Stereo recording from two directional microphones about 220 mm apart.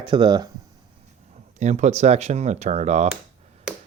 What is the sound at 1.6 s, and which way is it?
Speech, 35° right (ahead or behind).